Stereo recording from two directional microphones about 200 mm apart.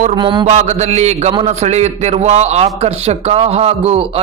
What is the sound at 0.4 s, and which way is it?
A man's voice, 35° right (ahead or behind).